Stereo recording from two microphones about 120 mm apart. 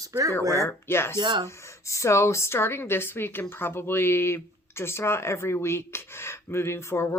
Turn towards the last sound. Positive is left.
turn(degrees=20)  # may be behind; listen again after turning